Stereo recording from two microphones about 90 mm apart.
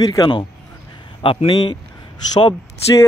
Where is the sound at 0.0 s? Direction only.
50° left (ahead or behind).